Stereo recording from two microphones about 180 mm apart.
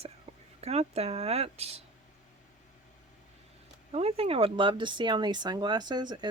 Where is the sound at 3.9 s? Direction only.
35° right (ahead or behind).